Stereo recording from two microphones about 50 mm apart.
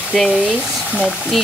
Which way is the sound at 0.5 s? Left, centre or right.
Right.